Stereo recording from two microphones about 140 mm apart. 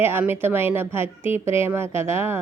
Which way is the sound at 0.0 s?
15° right (ahead or behind).